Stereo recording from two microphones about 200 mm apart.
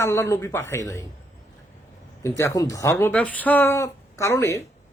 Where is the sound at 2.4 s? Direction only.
15° left (ahead or behind).